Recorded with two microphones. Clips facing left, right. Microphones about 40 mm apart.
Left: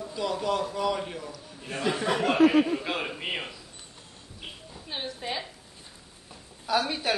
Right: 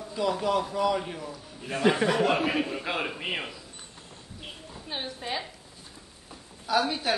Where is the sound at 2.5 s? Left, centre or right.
Centre.